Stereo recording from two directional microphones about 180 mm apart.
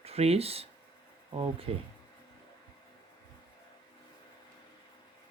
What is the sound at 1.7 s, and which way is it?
Speech, 35° right (ahead or behind).